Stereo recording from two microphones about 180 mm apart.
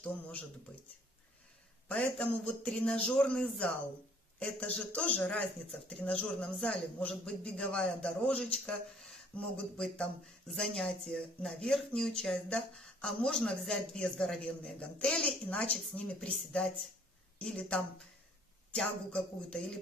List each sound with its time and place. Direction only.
0.0 s speech: 5° left (ahead or behind)
1.9 s a man's voice: 5° left (ahead or behind)